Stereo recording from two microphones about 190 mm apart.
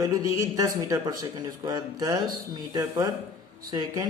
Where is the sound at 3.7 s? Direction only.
20° right (ahead or behind).